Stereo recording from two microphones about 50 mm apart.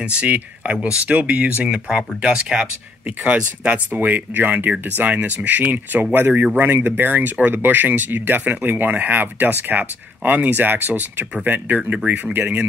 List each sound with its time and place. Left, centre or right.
0.0 s speech: right
2.2 s speech: centre
3.9 s speech: right